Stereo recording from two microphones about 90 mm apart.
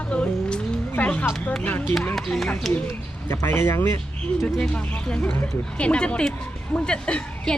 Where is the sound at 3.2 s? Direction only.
25° left (ahead or behind).